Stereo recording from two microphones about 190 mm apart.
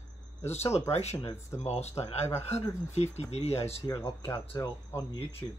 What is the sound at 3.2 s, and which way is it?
Speech, 35° left (ahead or behind).